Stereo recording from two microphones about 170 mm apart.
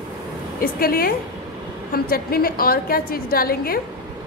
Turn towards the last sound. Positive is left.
turn(degrees=60)  # may be behind; listen again after turning